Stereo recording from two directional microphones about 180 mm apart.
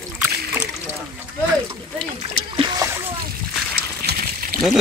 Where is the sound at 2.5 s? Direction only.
25° right (ahead or behind).